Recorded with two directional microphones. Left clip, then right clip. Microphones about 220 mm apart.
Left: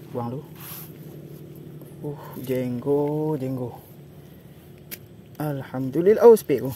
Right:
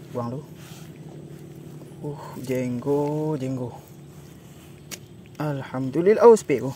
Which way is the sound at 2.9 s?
5° right (ahead or behind).